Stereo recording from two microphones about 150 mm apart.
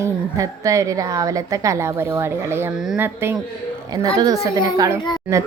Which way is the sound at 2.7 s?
5° right (ahead or behind).